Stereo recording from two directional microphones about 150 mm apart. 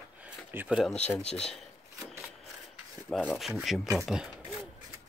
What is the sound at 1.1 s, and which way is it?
Speech, 5° left (ahead or behind).